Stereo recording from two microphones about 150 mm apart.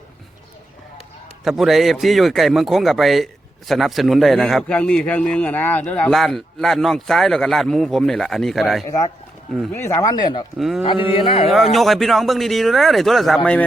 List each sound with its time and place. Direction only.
1.5 s speech: centre (ahead or behind)
9.7 s speech: 20° left (ahead or behind)
10.6 s speech: centre (ahead or behind)
11.1 s speech: 40° left (ahead or behind)
11.5 s speech: centre (ahead or behind)